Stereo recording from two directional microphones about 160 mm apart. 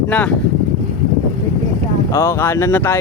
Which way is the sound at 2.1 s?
15° left (ahead or behind).